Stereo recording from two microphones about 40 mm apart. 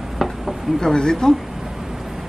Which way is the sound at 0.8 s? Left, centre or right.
Centre.